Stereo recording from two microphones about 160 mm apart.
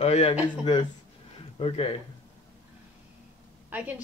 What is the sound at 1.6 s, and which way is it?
Speech, 35° left (ahead or behind).